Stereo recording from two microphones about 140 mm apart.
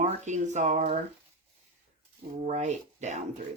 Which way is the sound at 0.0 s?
55° right (ahead or behind).